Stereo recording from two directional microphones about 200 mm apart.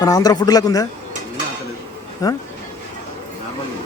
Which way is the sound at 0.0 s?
20° left (ahead or behind).